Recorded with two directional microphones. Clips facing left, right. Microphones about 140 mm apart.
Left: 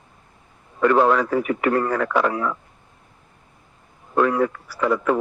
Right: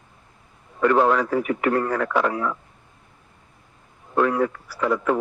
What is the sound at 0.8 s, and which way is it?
Speech, 90° left.